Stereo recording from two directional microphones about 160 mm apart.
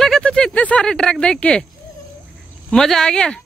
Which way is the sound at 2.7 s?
5° left (ahead or behind).